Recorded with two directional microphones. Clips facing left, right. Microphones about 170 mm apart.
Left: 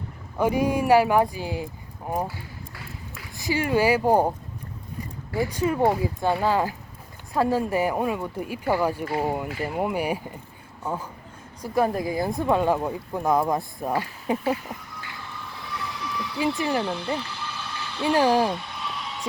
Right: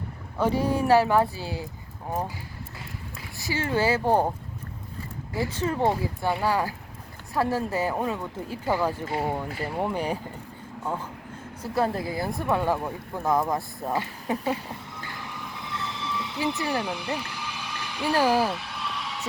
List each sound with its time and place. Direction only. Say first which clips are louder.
0.3 s speech: left 2 dB; 15° left (ahead or behind)
3.3 s speech: left 4 dB; 15° left (ahead or behind)
5.4 s speech: left 3 dB; 15° left (ahead or behind)
11.6 s speech: left 3 dB; 15° left (ahead or behind)
15.5 s train: left 1 dB; 20° right (ahead or behind)
16.6 s speech: left 3 dB; 15° left (ahead or behind)
16.8 s speech: left 3 dB; 10° right (ahead or behind)
17.2 s vehicle: left 1 dB; 10° right (ahead or behind)
18.0 s speech: left 3 dB; 15° left (ahead or behind)
18.5 s vehicle: left 1 dB; centre (ahead or behind)